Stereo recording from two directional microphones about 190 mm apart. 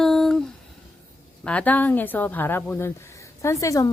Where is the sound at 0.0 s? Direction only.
Centre (ahead or behind).